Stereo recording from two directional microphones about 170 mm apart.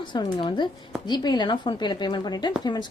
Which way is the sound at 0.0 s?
25° left (ahead or behind).